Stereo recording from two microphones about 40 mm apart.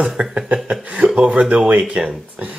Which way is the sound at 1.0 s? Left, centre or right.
Right.